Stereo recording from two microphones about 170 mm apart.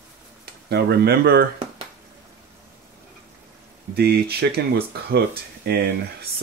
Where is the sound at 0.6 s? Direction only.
70° right (ahead or behind).